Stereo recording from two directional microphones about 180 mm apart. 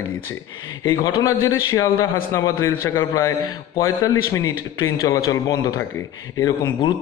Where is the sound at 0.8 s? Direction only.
15° left (ahead or behind).